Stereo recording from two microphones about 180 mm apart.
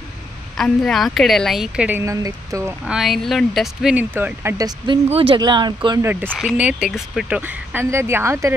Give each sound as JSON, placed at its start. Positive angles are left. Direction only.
{"t": 0.6, "sound": "a woman's voice", "side_deg": 5}
{"t": 2.9, "sound": "speech", "side_deg": 0}
{"t": 6.3, "sound": "speech", "side_deg": -5}